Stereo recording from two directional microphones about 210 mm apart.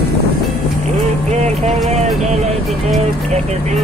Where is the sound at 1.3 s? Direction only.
35° right (ahead or behind).